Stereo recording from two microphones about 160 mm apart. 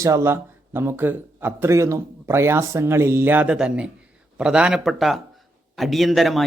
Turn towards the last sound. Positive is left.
turn(degrees=0)  # may be behind; listen again after turning